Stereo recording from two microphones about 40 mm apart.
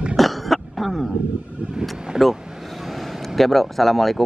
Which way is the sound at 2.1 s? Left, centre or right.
Centre.